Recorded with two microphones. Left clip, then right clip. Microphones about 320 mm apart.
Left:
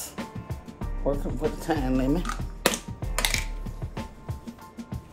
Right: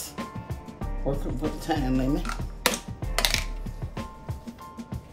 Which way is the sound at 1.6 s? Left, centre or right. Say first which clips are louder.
Even; centre.